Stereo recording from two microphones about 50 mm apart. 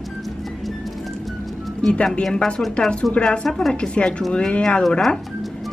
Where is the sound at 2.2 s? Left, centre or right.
Centre.